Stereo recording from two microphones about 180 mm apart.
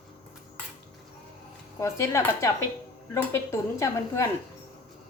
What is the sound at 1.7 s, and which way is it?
A woman's voice, 15° left (ahead or behind).